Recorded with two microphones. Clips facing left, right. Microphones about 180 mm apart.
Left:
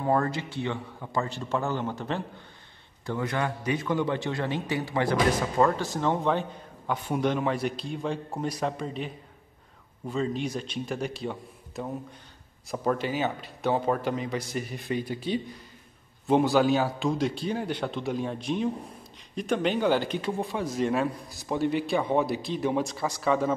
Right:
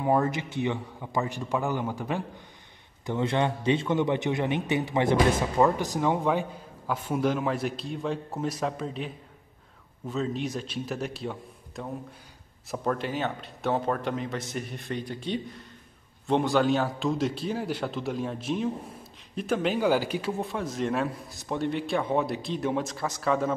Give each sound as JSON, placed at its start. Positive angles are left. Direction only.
{"t": 0.0, "sound": "a man's voice", "side_deg": -15}
{"t": 3.1, "sound": "a man's voice", "side_deg": -25}